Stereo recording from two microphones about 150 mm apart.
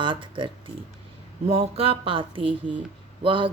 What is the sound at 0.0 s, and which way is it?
Speech, 35° right (ahead or behind).